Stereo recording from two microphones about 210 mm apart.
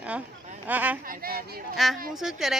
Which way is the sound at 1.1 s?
45° right (ahead or behind).